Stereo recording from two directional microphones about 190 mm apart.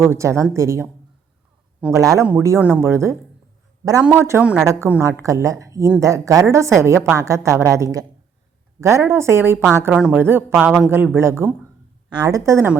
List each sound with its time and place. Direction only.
0.0 s a woman's voice: 15° right (ahead or behind)
1.9 s a woman's voice: 15° right (ahead or behind)
9.0 s a woman's voice: 15° right (ahead or behind)